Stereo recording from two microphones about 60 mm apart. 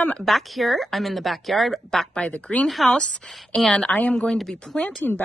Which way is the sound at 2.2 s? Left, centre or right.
Left.